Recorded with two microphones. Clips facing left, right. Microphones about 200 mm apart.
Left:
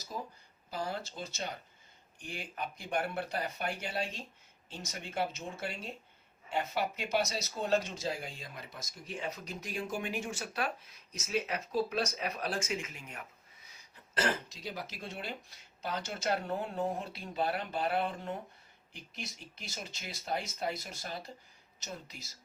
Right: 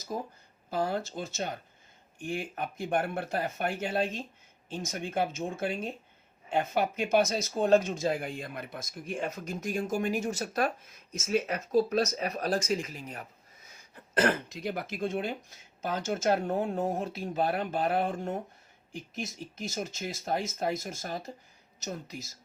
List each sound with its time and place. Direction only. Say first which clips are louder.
0.1 s speech: right 6 dB; 50° right (ahead or behind)